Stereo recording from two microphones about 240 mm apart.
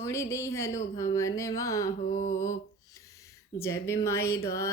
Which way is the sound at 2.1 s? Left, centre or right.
Left.